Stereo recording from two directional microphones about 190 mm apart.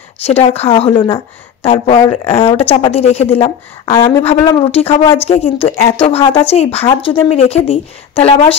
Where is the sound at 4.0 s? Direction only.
15° left (ahead or behind).